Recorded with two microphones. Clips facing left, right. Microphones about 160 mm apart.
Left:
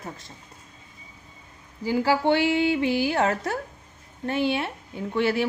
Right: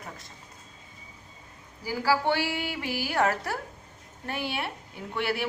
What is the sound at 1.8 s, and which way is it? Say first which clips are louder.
A woman's voice: left 4 dB; 20° left (ahead or behind).